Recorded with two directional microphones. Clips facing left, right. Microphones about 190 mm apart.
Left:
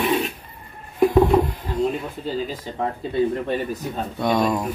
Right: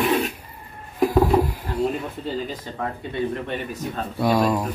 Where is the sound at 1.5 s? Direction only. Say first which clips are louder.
Left 1 dB; 10° right (ahead or behind).